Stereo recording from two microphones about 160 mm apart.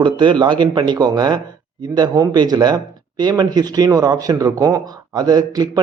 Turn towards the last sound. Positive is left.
turn(degrees=-25)  # may be behind; listen again after turning